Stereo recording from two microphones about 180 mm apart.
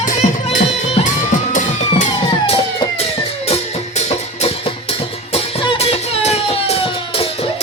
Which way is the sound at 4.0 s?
35° left (ahead or behind).